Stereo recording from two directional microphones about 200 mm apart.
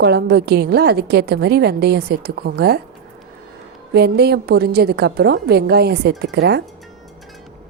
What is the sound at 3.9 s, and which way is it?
A woman's voice, 55° right (ahead or behind).